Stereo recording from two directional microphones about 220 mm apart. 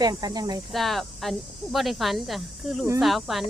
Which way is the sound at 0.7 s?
Centre (ahead or behind).